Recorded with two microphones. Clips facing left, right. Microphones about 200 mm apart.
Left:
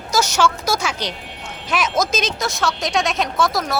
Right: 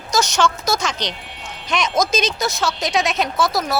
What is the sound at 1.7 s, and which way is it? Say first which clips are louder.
A woman's voice: right 1 dB; 5° left (ahead or behind).